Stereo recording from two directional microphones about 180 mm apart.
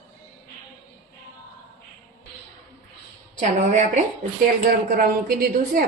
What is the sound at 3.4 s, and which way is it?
Speech, 45° right (ahead or behind).